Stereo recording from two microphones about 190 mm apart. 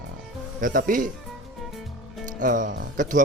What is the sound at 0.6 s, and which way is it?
Speech, 45° right (ahead or behind).